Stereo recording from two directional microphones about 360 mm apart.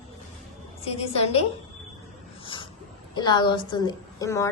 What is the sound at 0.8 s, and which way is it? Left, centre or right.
Speech, centre.